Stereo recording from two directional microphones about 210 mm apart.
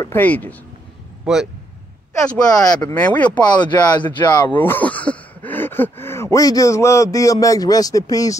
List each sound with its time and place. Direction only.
0.0 s speech: 10° left (ahead or behind)
1.2 s a man's voice: 5° right (ahead or behind)
2.1 s speech: 15° left (ahead or behind)
3.4 s speech: 20° left (ahead or behind)
4.0 s speech: 10° left (ahead or behind)